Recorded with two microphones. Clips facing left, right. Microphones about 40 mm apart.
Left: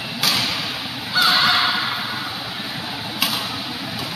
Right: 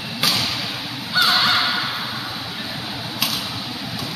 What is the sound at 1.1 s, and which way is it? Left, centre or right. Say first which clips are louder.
Crow: left 1 dB; centre.